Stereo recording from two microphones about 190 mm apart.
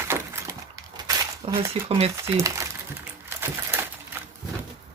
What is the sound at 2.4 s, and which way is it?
Speech, 15° right (ahead or behind).